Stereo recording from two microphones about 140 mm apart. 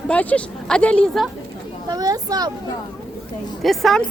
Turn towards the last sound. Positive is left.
turn(degrees=0)  # may be behind; listen again after turning